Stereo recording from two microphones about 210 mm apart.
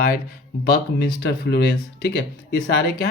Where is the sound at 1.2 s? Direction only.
50° left (ahead or behind).